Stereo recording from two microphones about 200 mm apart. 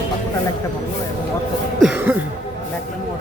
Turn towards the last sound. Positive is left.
turn(degrees=-5)  # may be behind; listen again after turning